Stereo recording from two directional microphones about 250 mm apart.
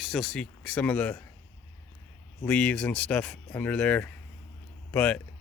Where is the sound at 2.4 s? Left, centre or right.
Centre.